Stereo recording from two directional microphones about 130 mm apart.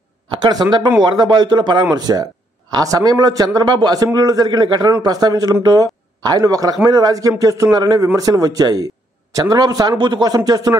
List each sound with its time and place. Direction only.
0.4 s a man's voice: 30° right (ahead or behind)